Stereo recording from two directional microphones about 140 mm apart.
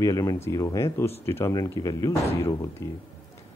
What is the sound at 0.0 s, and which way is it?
Speech, 25° left (ahead or behind).